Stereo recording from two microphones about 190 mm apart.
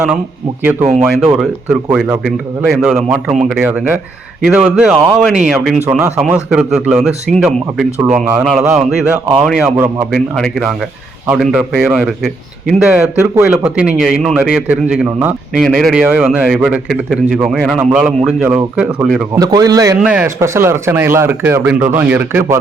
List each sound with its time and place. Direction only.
0.6 s speech: 10° right (ahead or behind)
1.9 s a man's voice: 5° right (ahead or behind)
19.4 s a man's voice: 20° right (ahead or behind)
20.0 s speech: 5° right (ahead or behind)